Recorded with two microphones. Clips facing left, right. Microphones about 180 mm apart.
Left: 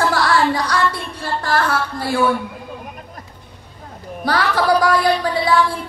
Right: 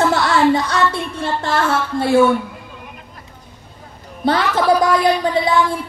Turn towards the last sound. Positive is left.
turn(degrees=-20)  # may be behind; listen again after turning